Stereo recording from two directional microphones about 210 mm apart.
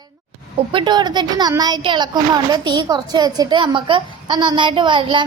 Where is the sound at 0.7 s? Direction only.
20° right (ahead or behind).